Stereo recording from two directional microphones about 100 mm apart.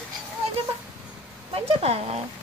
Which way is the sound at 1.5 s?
80° right.